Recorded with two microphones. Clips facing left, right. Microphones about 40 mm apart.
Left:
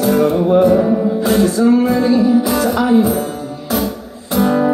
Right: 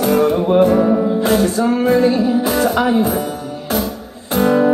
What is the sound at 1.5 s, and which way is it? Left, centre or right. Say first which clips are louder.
Music: left 2 dB; right.